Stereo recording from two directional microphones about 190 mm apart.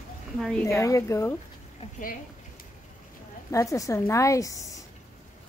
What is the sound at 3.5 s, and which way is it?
A woman's voice, 15° left (ahead or behind).